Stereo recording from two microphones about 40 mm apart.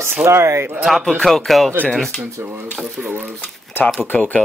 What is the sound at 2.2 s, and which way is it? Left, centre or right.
Speech, right.